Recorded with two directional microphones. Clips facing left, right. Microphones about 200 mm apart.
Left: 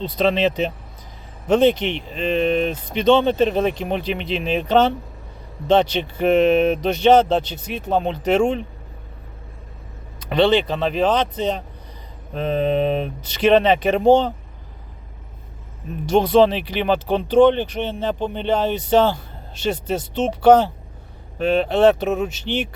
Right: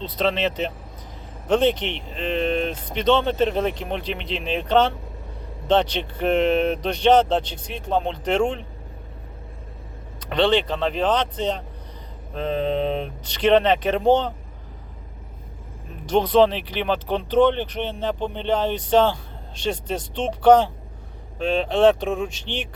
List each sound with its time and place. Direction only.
0.0 s speech: 10° left (ahead or behind)
10.2 s speech: 10° left (ahead or behind)
16.0 s speech: 10° left (ahead or behind)